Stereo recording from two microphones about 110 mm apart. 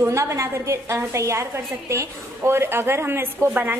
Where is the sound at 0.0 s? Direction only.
25° right (ahead or behind).